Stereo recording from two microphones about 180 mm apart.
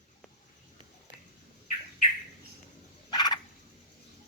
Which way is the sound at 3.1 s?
20° left (ahead or behind).